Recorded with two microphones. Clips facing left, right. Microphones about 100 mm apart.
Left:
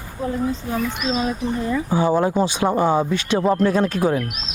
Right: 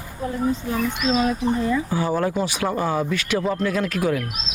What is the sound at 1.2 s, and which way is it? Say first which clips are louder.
Speech: right 2 dB; 20° left (ahead or behind).